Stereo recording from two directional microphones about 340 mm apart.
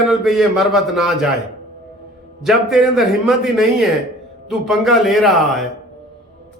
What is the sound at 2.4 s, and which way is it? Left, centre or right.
A man's voice, centre.